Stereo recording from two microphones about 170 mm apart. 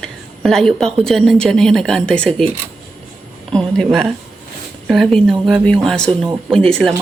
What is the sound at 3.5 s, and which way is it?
Speech, 5° left (ahead or behind).